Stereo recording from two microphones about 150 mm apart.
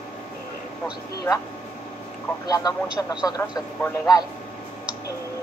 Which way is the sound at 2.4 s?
25° left (ahead or behind).